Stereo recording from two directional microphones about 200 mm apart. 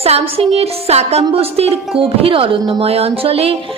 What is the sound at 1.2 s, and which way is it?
A woman's voice, 30° right (ahead or behind).